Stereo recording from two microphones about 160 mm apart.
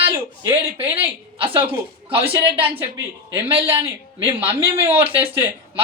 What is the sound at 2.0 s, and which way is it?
Speech, 35° right (ahead or behind).